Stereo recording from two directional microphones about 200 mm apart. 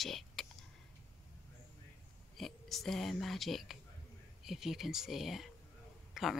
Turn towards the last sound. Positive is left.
turn(degrees=0)  # may be behind; listen again after turning